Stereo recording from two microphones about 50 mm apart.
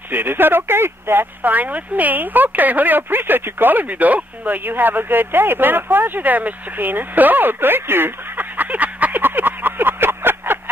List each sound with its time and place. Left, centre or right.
0.1 s speech: right
1.4 s speech: right